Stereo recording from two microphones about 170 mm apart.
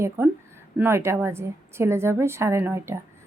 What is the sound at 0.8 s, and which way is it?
A woman's voice, 15° right (ahead or behind).